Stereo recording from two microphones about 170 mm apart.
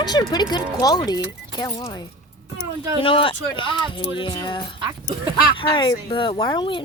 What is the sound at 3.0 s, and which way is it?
Speech, 30° left (ahead or behind).